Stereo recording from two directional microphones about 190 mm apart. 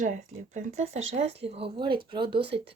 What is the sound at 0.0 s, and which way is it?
Speech, 40° right (ahead or behind).